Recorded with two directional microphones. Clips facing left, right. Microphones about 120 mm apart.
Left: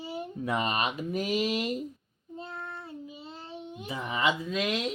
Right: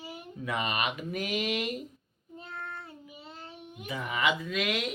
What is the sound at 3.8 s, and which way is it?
Speech, 30° left (ahead or behind).